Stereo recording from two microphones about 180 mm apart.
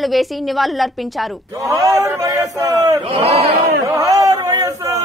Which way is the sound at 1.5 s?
20° right (ahead or behind).